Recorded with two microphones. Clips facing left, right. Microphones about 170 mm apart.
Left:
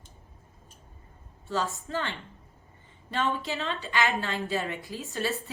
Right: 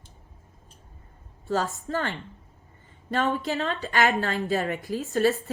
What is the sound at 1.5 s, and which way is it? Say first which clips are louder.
A woman's voice: right 4 dB; 40° right (ahead or behind).